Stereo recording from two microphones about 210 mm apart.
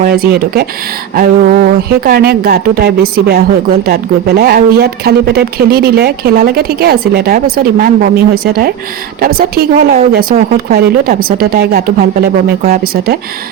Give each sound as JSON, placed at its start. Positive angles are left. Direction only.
{"t": 0.0, "sound": "speech", "side_deg": -45}